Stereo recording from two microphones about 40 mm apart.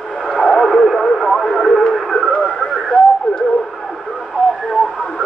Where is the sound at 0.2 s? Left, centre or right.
Centre.